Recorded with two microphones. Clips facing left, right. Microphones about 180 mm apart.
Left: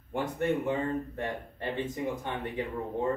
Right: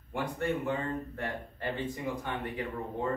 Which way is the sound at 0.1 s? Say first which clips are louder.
Left 3 dB; 20° left (ahead or behind).